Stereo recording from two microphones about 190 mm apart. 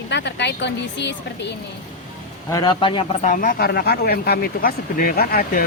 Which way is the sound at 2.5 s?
20° left (ahead or behind).